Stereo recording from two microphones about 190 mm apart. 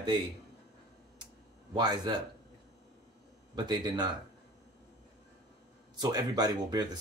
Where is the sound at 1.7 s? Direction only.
25° right (ahead or behind).